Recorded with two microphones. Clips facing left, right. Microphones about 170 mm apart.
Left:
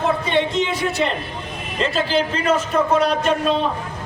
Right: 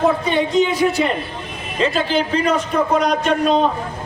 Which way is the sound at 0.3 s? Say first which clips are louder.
Right 3 dB; centre (ahead or behind).